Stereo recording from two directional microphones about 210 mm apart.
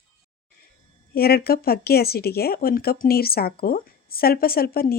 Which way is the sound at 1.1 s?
45° left (ahead or behind).